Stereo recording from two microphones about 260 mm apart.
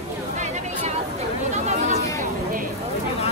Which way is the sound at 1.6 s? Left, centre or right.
Right.